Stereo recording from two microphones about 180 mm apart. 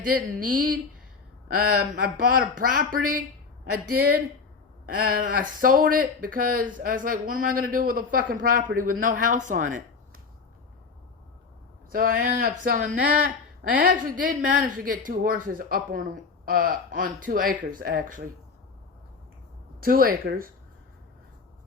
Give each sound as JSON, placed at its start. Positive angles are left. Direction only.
{"t": 0.0, "sound": "speech", "side_deg": -50}
{"t": 4.9, "sound": "speech", "side_deg": -55}
{"t": 11.9, "sound": "speech", "side_deg": -50}
{"t": 19.8, "sound": "speech", "side_deg": -55}